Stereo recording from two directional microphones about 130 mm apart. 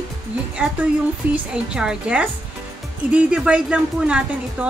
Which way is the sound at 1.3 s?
5° right (ahead or behind).